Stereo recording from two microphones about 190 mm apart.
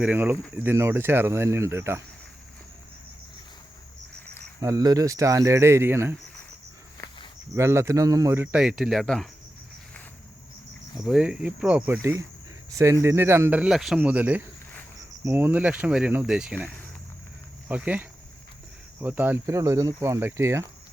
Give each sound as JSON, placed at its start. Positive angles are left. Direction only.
{"t": 0.0, "sound": "speech", "side_deg": -10}
{"t": 4.6, "sound": "speech", "side_deg": -20}
{"t": 7.5, "sound": "speech", "side_deg": -15}
{"t": 11.0, "sound": "speech", "side_deg": -5}
{"t": 17.7, "sound": "speech", "side_deg": -10}